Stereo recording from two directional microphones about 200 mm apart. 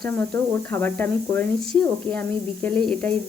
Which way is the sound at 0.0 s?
10° left (ahead or behind).